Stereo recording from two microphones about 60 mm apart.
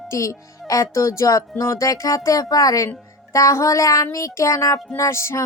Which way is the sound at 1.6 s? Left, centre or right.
Left.